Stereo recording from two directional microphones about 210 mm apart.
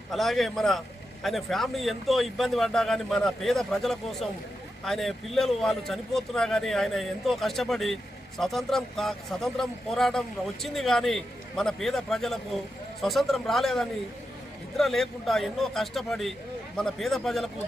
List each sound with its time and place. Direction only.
0.1 s speech: centre (ahead or behind)